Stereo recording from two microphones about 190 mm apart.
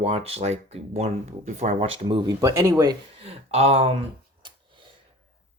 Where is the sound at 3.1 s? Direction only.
30° right (ahead or behind).